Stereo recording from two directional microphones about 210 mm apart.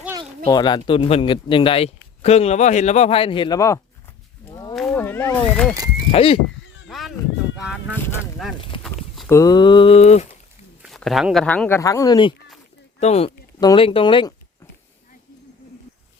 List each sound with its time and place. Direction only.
0.4 s a man's voice: 20° left (ahead or behind)
4.7 s a sound: 5° left (ahead or behind)
6.1 s a man's voice: 25° left (ahead or behind)
6.8 s a sound: centre (ahead or behind)
7.5 s speech: 5° right (ahead or behind)
8.8 s walk: centre (ahead or behind)
9.3 s a man's voice: 15° left (ahead or behind)
10.8 s speech: centre (ahead or behind); by 12.3 s 20° left (ahead or behind)
13.0 s speech: 30° left (ahead or behind)